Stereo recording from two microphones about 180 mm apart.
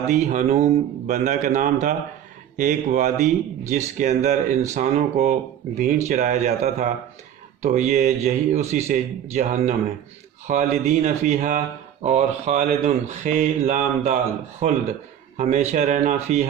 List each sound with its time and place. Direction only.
0.1 s a man's voice: 45° right (ahead or behind)